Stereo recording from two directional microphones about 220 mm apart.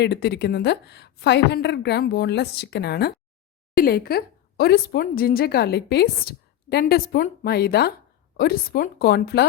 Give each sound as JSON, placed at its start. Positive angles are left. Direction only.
{"t": 0.0, "sound": "a woman's voice", "side_deg": 50}